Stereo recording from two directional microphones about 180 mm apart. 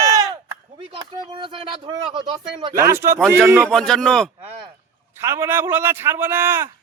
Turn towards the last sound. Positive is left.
turn(degrees=-10)  # may be behind; listen again after turning